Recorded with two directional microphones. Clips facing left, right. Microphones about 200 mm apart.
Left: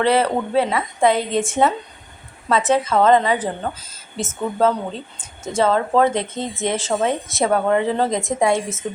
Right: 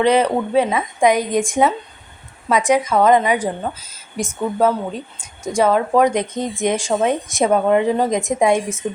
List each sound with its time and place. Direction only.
0.0 s a woman's voice: 15° right (ahead or behind)